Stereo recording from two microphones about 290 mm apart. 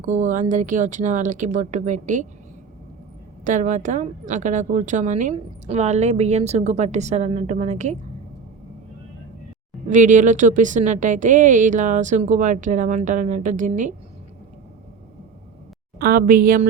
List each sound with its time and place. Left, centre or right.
0.0 s a woman's voice: right
3.4 s a woman's voice: right
9.9 s a woman's voice: right
16.0 s a woman's voice: right